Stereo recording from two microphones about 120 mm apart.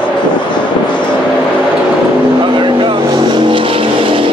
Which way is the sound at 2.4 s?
40° right (ahead or behind).